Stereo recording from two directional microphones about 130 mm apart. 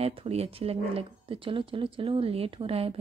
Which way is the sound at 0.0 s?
50° right (ahead or behind).